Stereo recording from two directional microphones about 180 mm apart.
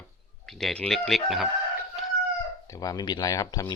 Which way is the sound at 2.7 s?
20° left (ahead or behind).